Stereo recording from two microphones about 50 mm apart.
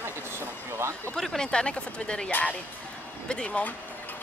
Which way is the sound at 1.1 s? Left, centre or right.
Centre.